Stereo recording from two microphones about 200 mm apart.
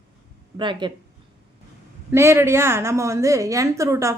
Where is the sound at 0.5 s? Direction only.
25° right (ahead or behind).